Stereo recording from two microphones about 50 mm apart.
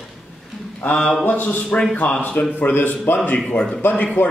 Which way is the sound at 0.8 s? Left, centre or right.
Left.